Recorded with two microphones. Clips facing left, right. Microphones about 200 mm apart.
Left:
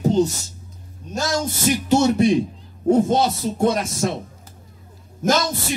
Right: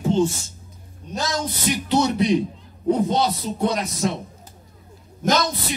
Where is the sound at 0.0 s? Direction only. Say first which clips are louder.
Left 2 dB; 40° left (ahead or behind).